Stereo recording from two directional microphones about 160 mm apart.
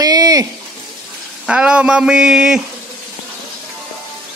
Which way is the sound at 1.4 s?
5° right (ahead or behind).